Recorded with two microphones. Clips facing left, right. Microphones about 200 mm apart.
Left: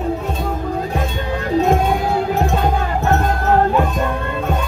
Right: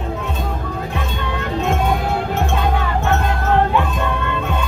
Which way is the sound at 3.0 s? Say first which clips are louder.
Left 2 dB; 40° left (ahead or behind).